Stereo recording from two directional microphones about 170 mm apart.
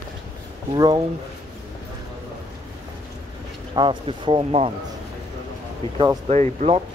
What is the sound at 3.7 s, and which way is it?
Speech, 30° right (ahead or behind).